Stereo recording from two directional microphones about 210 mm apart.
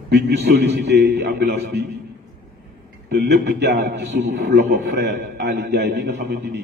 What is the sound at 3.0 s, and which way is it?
A man's voice, 50° right (ahead or behind).